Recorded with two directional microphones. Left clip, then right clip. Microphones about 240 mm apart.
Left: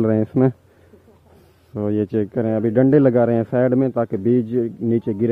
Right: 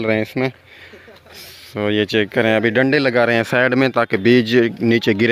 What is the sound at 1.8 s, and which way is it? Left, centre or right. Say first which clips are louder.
Speech: right 4 dB; centre.